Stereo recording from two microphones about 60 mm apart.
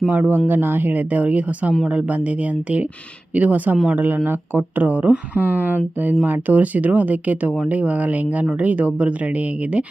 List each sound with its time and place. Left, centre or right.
0.1 s speech: right